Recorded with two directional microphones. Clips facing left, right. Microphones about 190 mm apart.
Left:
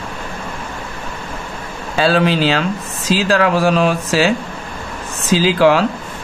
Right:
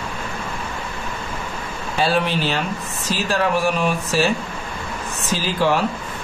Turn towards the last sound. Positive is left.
turn(degrees=90)